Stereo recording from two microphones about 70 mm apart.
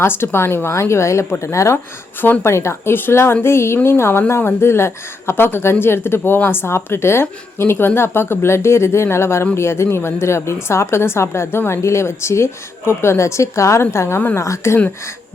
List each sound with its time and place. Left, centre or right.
0.0 s a woman's voice: left